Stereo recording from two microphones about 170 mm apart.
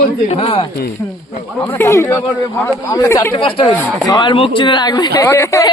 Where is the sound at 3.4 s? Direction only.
30° left (ahead or behind).